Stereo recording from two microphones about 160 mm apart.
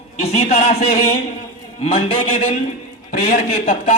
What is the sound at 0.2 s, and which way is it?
Speech, 40° left (ahead or behind).